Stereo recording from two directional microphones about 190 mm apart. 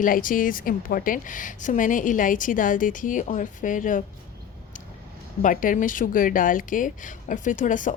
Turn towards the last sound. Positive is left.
turn(degrees=45)  # may be behind; listen again after turning